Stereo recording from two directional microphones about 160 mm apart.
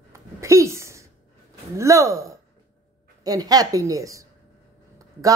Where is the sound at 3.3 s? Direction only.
25° right (ahead or behind).